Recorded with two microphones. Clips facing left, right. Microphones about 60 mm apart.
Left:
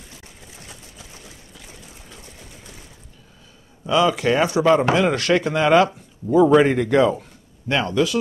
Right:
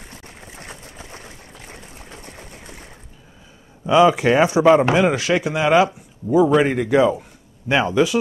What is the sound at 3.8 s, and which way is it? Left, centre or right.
Speech, right.